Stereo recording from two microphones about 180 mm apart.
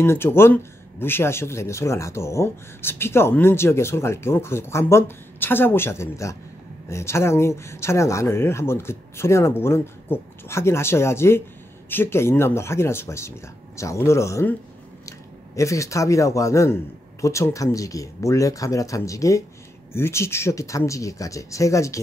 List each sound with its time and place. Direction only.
0.0 s speech: 15° left (ahead or behind)